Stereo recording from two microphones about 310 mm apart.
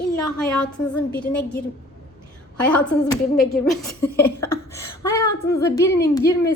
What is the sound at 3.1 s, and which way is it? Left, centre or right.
Speech, centre.